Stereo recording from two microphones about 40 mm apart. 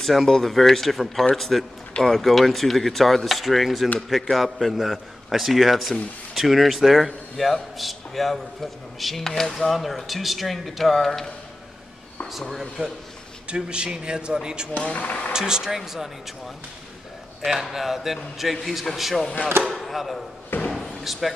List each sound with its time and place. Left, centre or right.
0.0 s a man's voice: centre
12.3 s speech: centre
13.6 s speech: right
14.9 s speech: left
15.3 s speech: centre
17.5 s a man's voice: centre
20.7 s slam: centre